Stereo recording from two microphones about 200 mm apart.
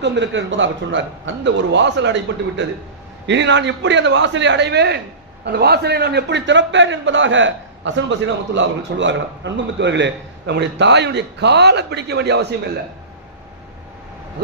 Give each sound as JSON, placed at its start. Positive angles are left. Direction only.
{"t": 0.0, "sound": "a man's voice", "side_deg": -65}